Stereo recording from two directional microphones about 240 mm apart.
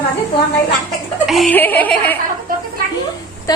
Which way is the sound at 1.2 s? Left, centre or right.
Centre.